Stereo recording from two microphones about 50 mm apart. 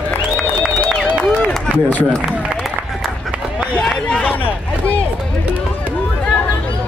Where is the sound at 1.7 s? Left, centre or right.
Left.